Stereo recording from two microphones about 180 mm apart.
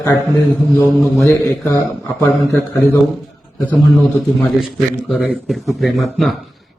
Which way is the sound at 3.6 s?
Centre (ahead or behind).